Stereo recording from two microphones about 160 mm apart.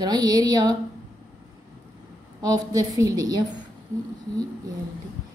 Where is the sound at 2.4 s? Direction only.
25° right (ahead or behind).